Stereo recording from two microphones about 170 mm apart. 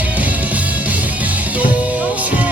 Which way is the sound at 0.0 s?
10° right (ahead or behind).